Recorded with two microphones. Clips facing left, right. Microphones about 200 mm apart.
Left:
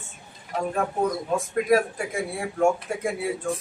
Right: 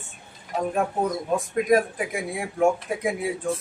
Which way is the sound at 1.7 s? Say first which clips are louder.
Right 1 dB; 15° right (ahead or behind).